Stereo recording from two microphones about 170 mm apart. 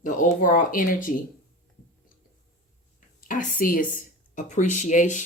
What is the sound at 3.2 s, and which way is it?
Speech, 55° left (ahead or behind).